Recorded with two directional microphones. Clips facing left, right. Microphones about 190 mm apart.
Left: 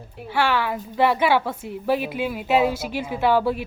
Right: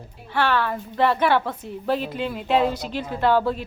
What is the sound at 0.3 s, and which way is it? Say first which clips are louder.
A woman's voice: even; 10° left (ahead or behind).